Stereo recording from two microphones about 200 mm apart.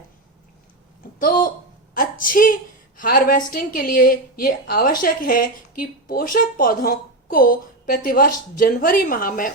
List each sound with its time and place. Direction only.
1.2 s a woman's voice: 45° left (ahead or behind)
1.9 s a sound: 45° left (ahead or behind)
3.0 s a woman's voice: 45° left (ahead or behind)